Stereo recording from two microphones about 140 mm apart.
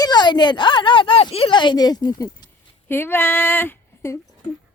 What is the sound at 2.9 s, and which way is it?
Speech, 15° left (ahead or behind).